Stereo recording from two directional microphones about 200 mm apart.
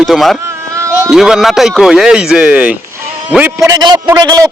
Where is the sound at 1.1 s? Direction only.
Centre (ahead or behind).